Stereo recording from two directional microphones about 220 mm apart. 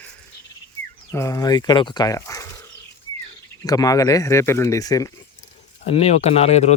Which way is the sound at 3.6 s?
15° left (ahead or behind).